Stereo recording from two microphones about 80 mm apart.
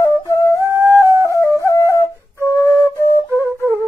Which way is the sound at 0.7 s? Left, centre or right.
Right.